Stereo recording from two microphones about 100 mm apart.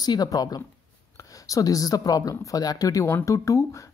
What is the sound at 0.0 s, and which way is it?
Speech, 40° left (ahead or behind).